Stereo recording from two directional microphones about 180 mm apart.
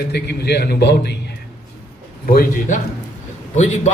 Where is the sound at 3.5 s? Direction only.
40° left (ahead or behind).